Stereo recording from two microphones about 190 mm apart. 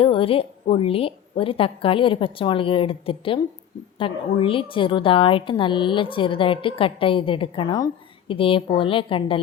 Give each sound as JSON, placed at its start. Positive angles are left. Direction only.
{"t": 0.0, "sound": "a woman's voice", "side_deg": 30}